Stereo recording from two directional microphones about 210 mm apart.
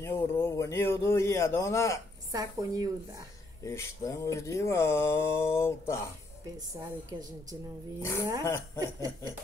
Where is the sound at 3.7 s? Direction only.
15° left (ahead or behind).